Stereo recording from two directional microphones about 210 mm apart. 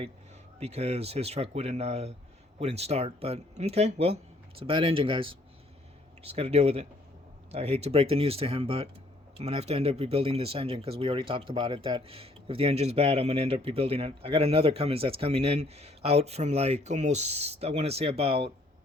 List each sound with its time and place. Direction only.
0.6 s speech: 30° right (ahead or behind)